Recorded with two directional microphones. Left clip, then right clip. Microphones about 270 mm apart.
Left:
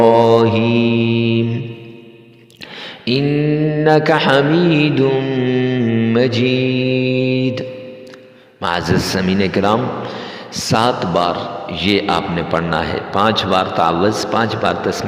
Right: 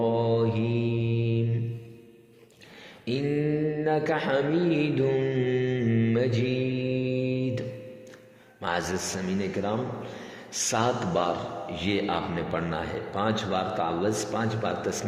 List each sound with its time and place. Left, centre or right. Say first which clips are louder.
0.0 s mantra: left 15 dB; left
3.0 s mantra: left 11 dB; left
8.9 s a man's voice: left 14 dB; left